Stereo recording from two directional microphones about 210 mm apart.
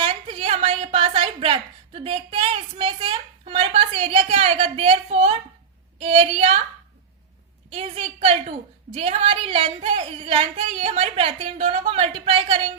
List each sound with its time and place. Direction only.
0.0 s a sound: 25° right (ahead or behind)
6.0 s a woman's voice: 30° right (ahead or behind)
7.7 s a woman's voice: 30° right (ahead or behind)